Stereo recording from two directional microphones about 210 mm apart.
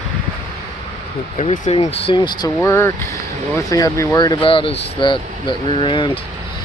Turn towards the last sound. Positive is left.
turn(degrees=25)  # may be behind; listen again after turning